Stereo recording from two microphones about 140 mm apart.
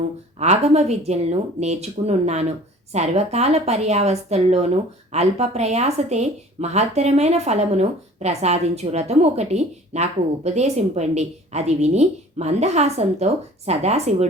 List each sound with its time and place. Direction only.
0.3 s speech: 50° right (ahead or behind)